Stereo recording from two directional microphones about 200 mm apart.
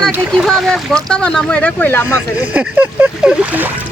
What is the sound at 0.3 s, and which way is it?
Speech, centre (ahead or behind).